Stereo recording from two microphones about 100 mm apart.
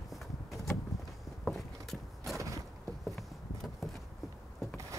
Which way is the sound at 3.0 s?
Centre (ahead or behind).